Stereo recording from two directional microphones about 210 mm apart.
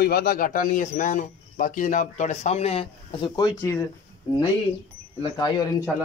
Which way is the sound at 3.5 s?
10° left (ahead or behind).